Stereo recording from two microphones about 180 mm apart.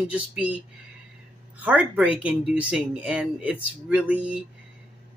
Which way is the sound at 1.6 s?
10° right (ahead or behind).